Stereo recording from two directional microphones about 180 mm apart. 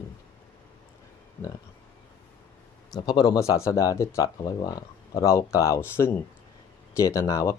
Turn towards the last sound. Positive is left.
turn(degrees=15)  # may be behind; listen again after turning